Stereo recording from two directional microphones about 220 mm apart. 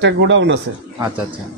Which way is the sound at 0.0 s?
55° right (ahead or behind).